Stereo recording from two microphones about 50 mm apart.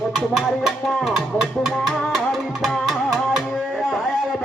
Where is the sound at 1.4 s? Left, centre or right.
Centre.